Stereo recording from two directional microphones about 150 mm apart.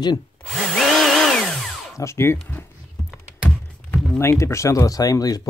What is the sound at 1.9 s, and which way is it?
Speech, 20° left (ahead or behind).